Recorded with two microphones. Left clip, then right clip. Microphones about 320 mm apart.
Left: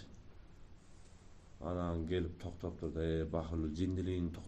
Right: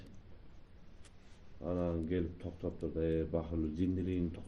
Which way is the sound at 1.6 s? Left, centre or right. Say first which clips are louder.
Right 3 dB; left.